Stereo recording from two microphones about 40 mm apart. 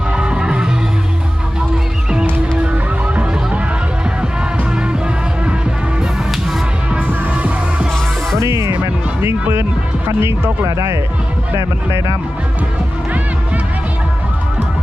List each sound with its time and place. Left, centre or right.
0.1 s music: right
7.3 s music: right
10.2 s speech: right